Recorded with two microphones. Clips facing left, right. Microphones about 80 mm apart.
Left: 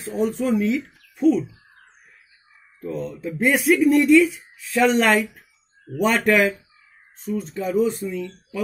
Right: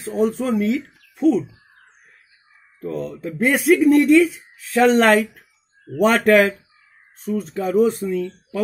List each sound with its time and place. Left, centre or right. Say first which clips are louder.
0.1 s speech: right 2 dB; right
2.8 s speech: right 2 dB; right
7.9 s speech: right 5 dB; right